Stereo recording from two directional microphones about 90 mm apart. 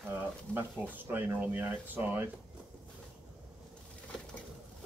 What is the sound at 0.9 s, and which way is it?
Speech, 20° right (ahead or behind).